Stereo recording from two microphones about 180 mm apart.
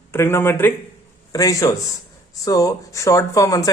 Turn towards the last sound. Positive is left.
turn(degrees=20)  # may be behind; listen again after turning